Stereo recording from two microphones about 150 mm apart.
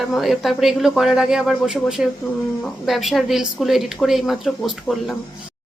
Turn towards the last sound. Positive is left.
turn(degrees=0)  # may be behind; listen again after turning